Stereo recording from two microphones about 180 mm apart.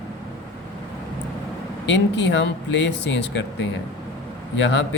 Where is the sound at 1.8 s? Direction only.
80° left.